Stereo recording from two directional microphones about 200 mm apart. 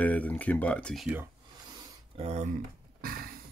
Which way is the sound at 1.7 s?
30° right (ahead or behind).